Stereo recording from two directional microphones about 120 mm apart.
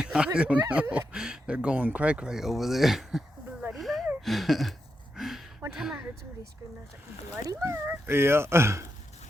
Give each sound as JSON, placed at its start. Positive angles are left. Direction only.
{"t": 0.0, "sound": "speech", "side_deg": -10}
{"t": 3.7, "sound": "a sound", "side_deg": 0}
{"t": 7.4, "sound": "speech", "side_deg": -25}